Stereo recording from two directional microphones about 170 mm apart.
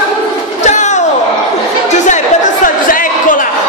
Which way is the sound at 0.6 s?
45° left (ahead or behind).